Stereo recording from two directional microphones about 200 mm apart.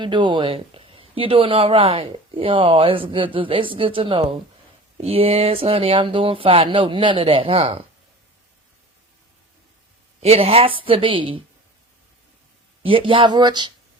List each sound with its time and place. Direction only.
0.0 s speech: 25° right (ahead or behind)
10.2 s speech: 30° right (ahead or behind)
12.8 s speech: 25° right (ahead or behind)